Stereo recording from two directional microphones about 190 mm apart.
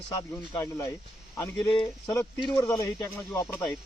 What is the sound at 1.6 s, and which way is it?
Speech, 10° left (ahead or behind).